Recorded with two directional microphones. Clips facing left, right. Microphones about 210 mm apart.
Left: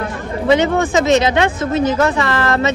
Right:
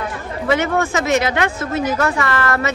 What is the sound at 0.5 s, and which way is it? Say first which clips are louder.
Speech: left 4 dB; 20° left (ahead or behind).